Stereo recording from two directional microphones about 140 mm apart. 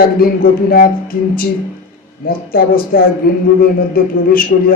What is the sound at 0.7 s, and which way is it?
Speech, 90° left.